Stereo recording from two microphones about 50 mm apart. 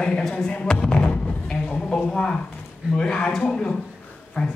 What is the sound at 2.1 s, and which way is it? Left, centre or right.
A man's voice, centre.